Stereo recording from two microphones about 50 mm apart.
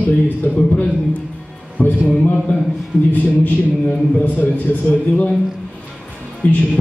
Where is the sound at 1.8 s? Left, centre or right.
Left.